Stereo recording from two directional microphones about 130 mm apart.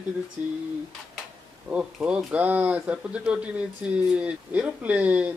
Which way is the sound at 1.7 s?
10° right (ahead or behind).